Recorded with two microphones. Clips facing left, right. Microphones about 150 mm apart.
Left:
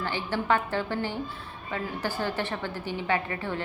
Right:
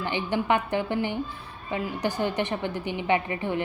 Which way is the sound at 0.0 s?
20° right (ahead or behind).